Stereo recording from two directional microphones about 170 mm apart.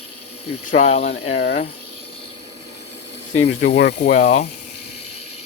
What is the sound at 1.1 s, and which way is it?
Speech, 75° left (ahead or behind).